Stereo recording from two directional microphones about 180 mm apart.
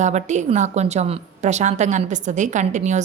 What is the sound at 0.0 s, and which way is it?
A woman's voice, 40° right (ahead or behind).